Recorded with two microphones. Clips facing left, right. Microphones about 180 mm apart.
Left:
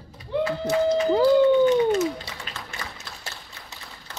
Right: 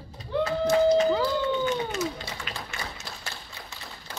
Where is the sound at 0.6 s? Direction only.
35° left (ahead or behind).